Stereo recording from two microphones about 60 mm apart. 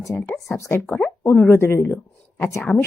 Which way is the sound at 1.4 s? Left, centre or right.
Left.